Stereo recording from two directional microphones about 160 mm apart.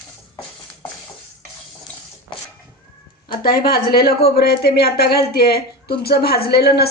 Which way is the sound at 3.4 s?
70° left (ahead or behind).